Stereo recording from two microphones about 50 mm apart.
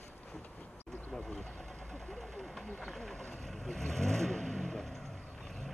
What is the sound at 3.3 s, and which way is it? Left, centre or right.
Vehicle, centre.